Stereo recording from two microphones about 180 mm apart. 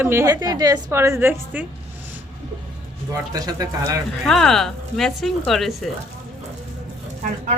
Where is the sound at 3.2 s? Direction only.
20° right (ahead or behind).